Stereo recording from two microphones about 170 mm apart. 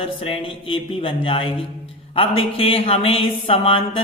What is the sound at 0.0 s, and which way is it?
Speech, 30° left (ahead or behind).